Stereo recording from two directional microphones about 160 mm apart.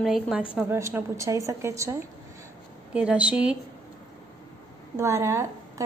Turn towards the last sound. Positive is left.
turn(degrees=-20)  # may be behind; listen again after turning